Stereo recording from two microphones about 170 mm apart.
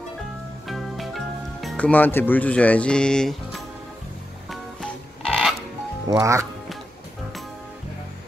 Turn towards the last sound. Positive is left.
turn(degrees=-15)  # may be behind; listen again after turning